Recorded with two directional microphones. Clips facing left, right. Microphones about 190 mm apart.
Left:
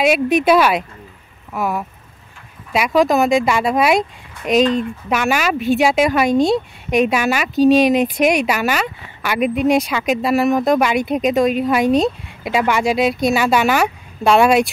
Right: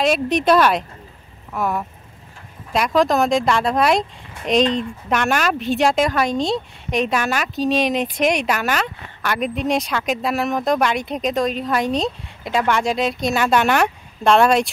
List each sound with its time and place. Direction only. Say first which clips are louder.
0.0 s speech: left 3 dB; 5° left (ahead or behind)